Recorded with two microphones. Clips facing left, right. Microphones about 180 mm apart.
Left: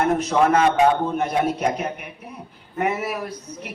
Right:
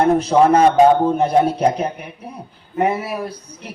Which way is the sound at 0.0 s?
30° right (ahead or behind).